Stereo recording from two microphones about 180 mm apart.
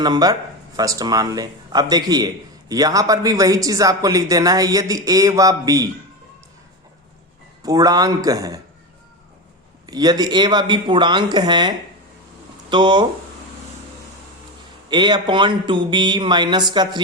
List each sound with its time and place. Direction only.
0.0 s a man's voice: 20° right (ahead or behind)
7.6 s a man's voice: 20° right (ahead or behind)
9.8 s a man's voice: 20° right (ahead or behind)
14.8 s a man's voice: 25° right (ahead or behind)